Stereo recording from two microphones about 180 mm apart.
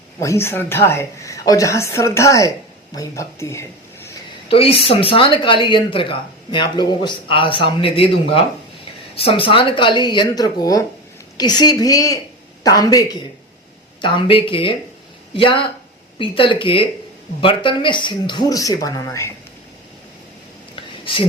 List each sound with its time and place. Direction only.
0.2 s a woman's voice: 15° left (ahead or behind)
4.4 s speech: 30° left (ahead or behind)
20.7 s a sound: 30° left (ahead or behind)